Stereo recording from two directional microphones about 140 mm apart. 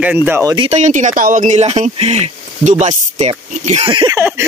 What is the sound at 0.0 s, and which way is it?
Speech, 10° right (ahead or behind).